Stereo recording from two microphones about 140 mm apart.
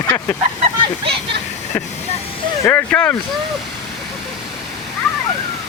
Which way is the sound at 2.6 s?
10° left (ahead or behind).